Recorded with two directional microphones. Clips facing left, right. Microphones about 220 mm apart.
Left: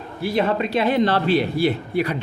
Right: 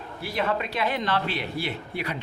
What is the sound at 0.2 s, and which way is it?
A man's voice, 30° left (ahead or behind).